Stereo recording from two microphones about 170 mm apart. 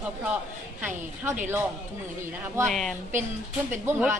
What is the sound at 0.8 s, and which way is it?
Speech, 10° right (ahead or behind).